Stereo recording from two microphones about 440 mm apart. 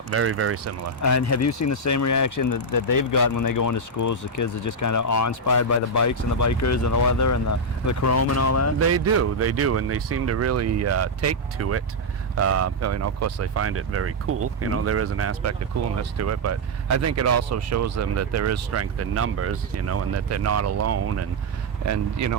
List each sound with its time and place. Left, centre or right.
0.1 s speech: right
1.0 s speech: left
9.1 s speech: right